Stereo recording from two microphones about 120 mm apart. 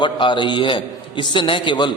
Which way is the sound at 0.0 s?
40° left (ahead or behind).